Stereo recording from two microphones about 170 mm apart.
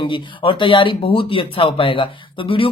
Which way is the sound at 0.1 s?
30° left (ahead or behind).